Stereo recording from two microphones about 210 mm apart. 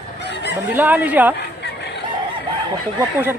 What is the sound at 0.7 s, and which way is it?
Speech, 10° right (ahead or behind).